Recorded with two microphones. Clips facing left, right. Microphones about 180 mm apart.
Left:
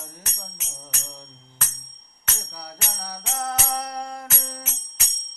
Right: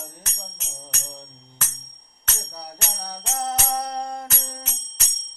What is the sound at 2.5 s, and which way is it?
Music, 25° right (ahead or behind).